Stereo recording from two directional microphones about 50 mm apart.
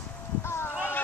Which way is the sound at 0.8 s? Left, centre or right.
Left.